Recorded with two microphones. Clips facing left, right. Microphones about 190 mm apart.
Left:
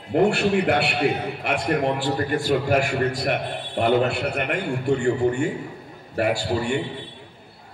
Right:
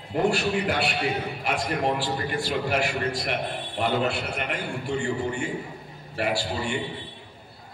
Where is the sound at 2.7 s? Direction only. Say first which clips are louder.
Left 5 dB; 50° left (ahead or behind).